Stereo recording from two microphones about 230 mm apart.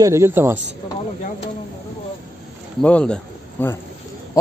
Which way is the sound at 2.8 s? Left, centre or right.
Centre.